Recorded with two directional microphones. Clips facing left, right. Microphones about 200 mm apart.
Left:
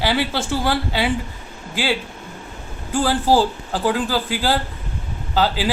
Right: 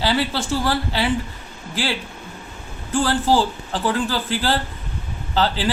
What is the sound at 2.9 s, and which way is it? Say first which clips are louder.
A man's voice: left 1 dB; 10° left (ahead or behind).